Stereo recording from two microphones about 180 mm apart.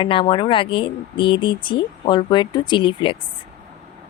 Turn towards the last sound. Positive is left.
turn(degrees=30)  # may be behind; listen again after turning